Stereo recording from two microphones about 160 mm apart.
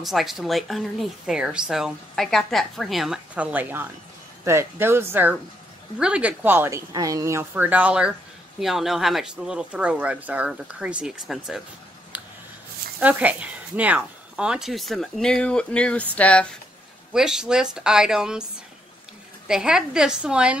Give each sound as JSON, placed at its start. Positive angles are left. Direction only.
{"t": 0.0, "sound": "a woman's voice", "side_deg": 0}
{"t": 13.0, "sound": "a woman's voice", "side_deg": -10}
{"t": 17.1, "sound": "a woman's voice", "side_deg": -5}
{"t": 19.4, "sound": "a woman's voice", "side_deg": -5}